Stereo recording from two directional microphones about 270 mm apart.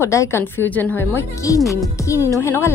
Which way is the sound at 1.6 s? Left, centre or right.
Centre.